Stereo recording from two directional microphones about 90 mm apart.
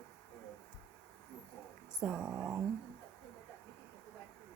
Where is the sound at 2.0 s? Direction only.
5° right (ahead or behind).